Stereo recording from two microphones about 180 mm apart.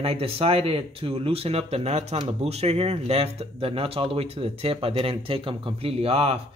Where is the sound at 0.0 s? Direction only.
30° right (ahead or behind).